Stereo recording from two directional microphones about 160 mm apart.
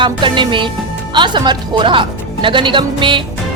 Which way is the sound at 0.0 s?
30° right (ahead or behind).